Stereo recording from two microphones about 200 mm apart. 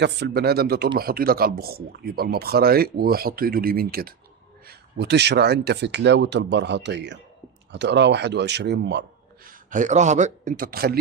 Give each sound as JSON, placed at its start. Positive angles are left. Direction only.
{"t": 0.0, "sound": "speech", "side_deg": -55}